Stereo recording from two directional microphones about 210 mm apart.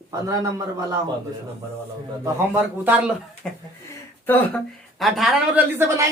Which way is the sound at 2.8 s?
10° right (ahead or behind).